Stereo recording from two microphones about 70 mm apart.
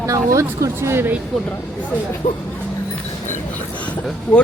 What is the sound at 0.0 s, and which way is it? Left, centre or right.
Speech, right.